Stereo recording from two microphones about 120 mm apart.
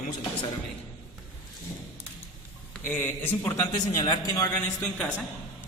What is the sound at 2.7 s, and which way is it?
A man's voice, 15° left (ahead or behind).